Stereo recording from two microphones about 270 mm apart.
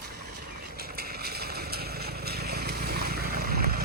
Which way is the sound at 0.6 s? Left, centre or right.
Right.